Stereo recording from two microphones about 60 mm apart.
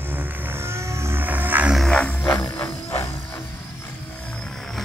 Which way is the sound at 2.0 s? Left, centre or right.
Left.